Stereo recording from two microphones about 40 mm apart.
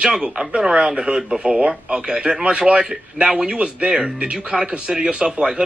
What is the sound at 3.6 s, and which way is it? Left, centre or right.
A man's voice, right.